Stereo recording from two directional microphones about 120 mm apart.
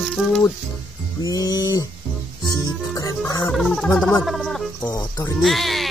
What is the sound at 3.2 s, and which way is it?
Speech, 25° left (ahead or behind).